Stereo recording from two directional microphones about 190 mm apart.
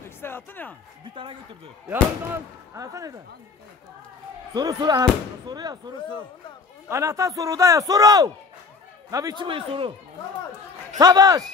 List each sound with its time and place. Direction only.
0.2 s speech: 10° left (ahead or behind)
2.7 s a man's voice: 15° right (ahead or behind)
4.6 s a man's voice: 20° right (ahead or behind)
11.0 s speech: 20° right (ahead or behind)